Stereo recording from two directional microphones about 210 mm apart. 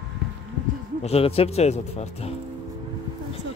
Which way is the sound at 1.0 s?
30° left (ahead or behind).